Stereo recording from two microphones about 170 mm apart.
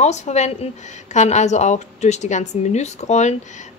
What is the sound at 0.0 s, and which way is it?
A woman's voice, 40° left (ahead or behind).